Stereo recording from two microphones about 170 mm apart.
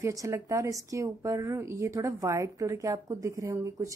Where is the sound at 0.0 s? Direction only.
20° right (ahead or behind).